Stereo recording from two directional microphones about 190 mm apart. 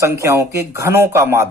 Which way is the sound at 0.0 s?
15° right (ahead or behind).